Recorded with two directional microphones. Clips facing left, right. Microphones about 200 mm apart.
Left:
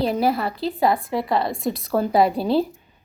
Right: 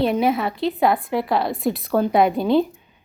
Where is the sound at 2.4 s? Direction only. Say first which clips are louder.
Right 2 dB; 35° left (ahead or behind).